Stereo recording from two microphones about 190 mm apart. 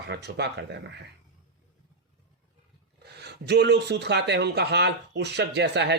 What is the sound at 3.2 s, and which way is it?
Speech, 60° right (ahead or behind).